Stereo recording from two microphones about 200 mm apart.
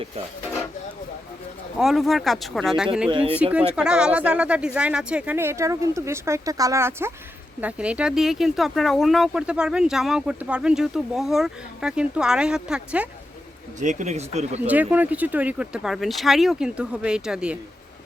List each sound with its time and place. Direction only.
1.8 s speech: centre (ahead or behind)
3.1 s speech: 25° right (ahead or behind)
3.4 s speech: 5° right (ahead or behind)
13.7 s speech: 35° right (ahead or behind)
14.7 s speech: 10° right (ahead or behind)